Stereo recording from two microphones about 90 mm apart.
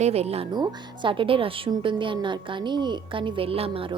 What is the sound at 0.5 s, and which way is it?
A woman's voice, 60° right (ahead or behind).